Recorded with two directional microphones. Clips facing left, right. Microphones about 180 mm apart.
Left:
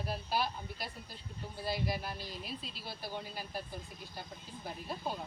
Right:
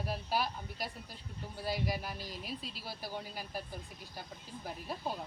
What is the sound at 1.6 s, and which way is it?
Speech, 10° right (ahead or behind).